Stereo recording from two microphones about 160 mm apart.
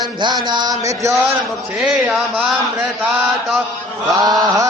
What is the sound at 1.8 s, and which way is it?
Speech, 5° right (ahead or behind).